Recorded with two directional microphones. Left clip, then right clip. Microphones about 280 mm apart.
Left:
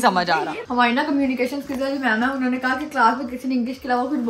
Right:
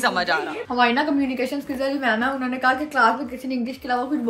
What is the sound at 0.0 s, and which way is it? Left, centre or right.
Speech, centre.